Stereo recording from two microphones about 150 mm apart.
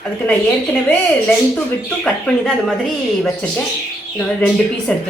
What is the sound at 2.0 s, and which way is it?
A woman's voice, 5° left (ahead or behind).